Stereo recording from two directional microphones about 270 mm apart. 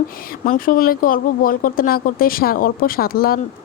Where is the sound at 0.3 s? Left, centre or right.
Left.